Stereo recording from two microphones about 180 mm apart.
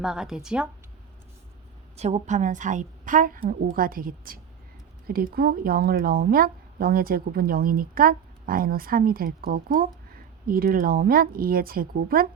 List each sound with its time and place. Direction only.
0.0 s a woman's voice: 5° right (ahead or behind)
2.0 s a woman's voice: 40° right (ahead or behind)